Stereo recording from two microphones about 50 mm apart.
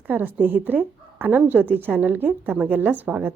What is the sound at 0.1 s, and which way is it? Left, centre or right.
A woman's voice, right.